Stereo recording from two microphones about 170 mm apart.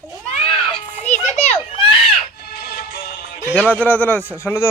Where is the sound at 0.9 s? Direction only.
45° left (ahead or behind).